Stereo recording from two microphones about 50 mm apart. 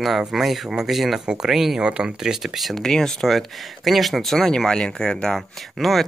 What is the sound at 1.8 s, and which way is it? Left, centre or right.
Speech, centre.